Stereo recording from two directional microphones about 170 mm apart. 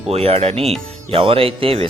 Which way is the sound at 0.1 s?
35° right (ahead or behind).